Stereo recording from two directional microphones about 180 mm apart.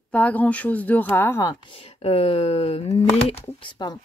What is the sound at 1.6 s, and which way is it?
Speech, 30° left (ahead or behind).